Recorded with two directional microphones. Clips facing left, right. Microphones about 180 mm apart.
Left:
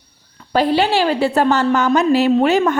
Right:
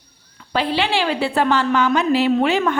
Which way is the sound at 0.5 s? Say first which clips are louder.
Left 5 dB; 45° left (ahead or behind).